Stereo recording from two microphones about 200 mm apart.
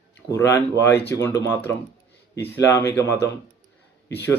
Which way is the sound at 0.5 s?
10° left (ahead or behind).